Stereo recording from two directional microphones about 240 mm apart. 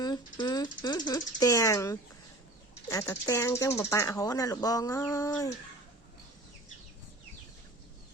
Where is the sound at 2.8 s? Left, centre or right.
Centre.